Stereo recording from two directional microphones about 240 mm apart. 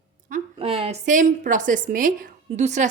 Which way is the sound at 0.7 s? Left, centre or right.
Right.